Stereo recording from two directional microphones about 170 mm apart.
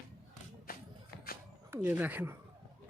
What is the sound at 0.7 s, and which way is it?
Music, 60° left (ahead or behind).